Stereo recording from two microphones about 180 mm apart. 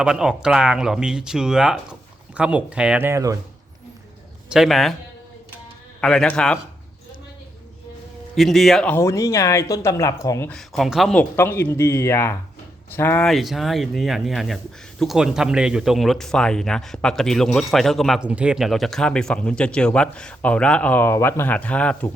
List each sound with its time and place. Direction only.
0.0 s speech: 5° right (ahead or behind)
4.4 s speech: centre (ahead or behind)
6.0 s speech: 5° left (ahead or behind)
8.4 s speech: centre (ahead or behind); by 10.5 s 15° left (ahead or behind)
10.5 s speech: centre (ahead or behind)
13.2 s speech: centre (ahead or behind)